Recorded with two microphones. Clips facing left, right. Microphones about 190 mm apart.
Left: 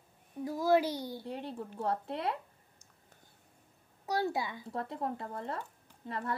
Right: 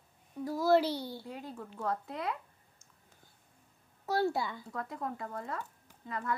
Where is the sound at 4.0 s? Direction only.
15° left (ahead or behind).